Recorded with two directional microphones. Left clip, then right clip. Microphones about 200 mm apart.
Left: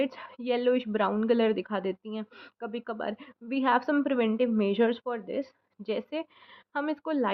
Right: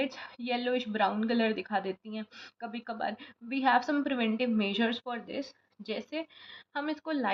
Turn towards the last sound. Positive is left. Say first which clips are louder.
# left 4 dB
turn(degrees=40)  # may be behind; listen again after turning